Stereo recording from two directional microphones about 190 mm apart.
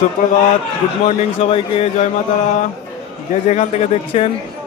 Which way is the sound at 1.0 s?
30° left (ahead or behind).